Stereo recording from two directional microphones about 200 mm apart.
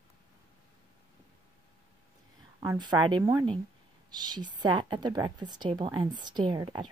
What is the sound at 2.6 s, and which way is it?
A woman's voice, 20° right (ahead or behind).